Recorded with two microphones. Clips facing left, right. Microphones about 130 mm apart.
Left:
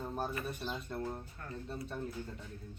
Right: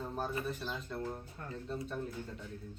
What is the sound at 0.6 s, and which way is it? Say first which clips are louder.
Speech: even; 15° left (ahead or behind).